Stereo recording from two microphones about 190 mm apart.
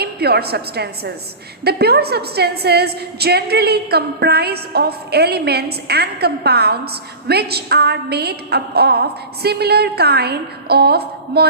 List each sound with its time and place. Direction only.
0.0 s a woman's voice: 55° right (ahead or behind)